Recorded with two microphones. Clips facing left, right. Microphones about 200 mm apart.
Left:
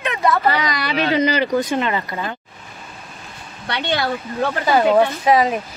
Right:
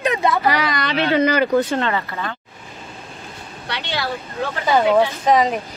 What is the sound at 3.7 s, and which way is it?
Speech, 55° left (ahead or behind).